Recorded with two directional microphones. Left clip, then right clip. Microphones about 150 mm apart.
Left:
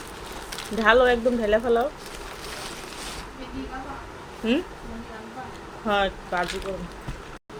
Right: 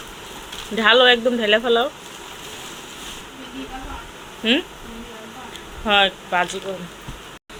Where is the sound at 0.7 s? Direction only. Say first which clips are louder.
Right 5 dB; 5° left (ahead or behind).